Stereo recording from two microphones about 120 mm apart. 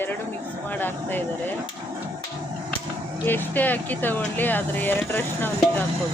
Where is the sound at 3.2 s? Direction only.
15° left (ahead or behind).